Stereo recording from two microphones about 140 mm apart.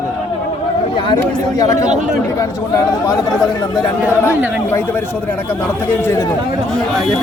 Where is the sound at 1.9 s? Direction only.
60° right (ahead or behind).